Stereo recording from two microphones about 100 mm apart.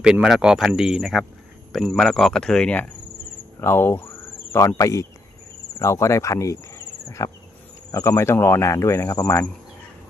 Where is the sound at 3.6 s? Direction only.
25° left (ahead or behind).